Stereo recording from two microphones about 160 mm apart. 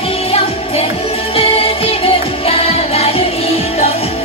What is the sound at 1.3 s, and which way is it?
Music, 35° left (ahead or behind).